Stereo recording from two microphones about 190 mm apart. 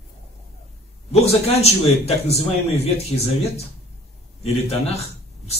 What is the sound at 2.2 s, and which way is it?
Speech, 35° left (ahead or behind).